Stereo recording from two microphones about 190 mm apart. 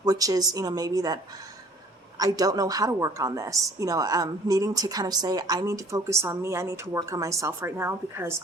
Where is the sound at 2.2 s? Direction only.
20° right (ahead or behind).